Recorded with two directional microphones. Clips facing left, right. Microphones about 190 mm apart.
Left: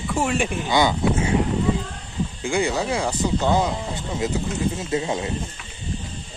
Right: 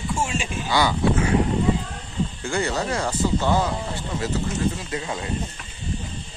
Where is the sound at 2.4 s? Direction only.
10° left (ahead or behind).